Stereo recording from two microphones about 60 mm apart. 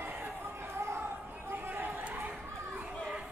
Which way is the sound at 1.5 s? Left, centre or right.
Right.